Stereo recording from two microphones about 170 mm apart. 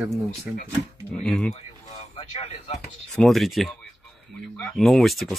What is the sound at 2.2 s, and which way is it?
Speech, 40° left (ahead or behind).